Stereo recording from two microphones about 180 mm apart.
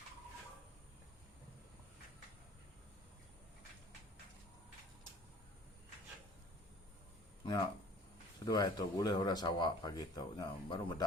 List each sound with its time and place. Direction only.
7.4 s speech: 20° left (ahead or behind)